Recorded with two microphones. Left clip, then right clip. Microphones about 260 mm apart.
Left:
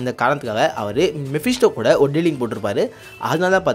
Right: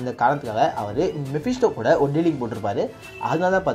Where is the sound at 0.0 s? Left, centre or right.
Left.